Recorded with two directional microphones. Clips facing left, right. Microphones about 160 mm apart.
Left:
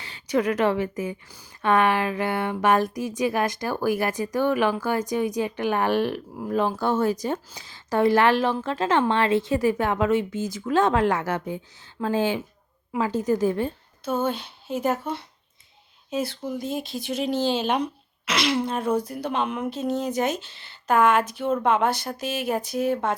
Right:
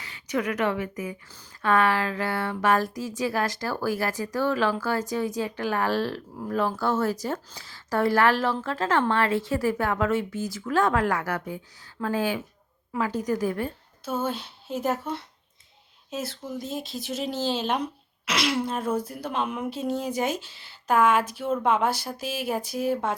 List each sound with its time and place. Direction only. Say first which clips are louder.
0.0 s a woman's voice: left 5 dB; 30° left (ahead or behind)
14.0 s speech: left 3 dB; 5° right (ahead or behind)